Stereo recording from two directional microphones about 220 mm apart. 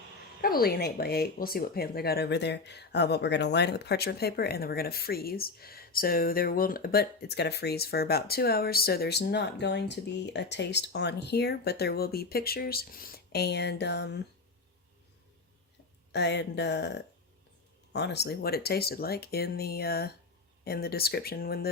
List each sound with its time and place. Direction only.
0.4 s speech: 45° left (ahead or behind)
16.1 s speech: 50° left (ahead or behind)